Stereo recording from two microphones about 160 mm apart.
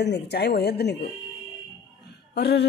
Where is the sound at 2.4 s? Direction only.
90° left.